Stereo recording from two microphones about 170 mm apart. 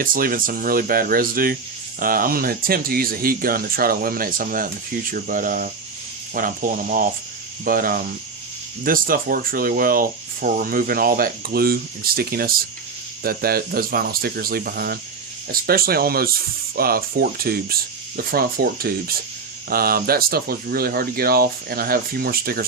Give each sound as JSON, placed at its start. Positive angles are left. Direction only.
{"t": 0.0, "sound": "speech", "side_deg": -55}